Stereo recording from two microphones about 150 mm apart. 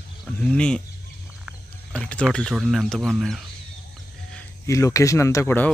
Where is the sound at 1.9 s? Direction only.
5° left (ahead or behind).